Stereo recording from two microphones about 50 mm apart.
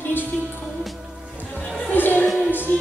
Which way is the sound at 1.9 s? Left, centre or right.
Left.